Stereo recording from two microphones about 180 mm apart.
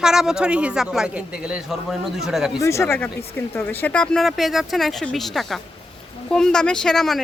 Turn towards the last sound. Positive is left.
turn(degrees=0)  # may be behind; listen again after turning